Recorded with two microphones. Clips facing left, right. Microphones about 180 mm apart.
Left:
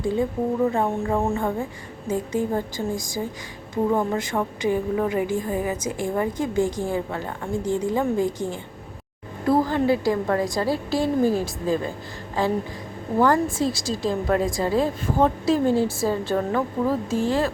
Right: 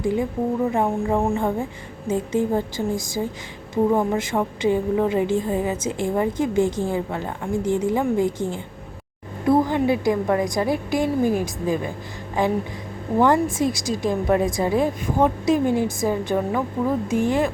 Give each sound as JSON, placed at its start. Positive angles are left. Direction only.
{"t": 0.0, "sound": "a woman's voice", "side_deg": -15}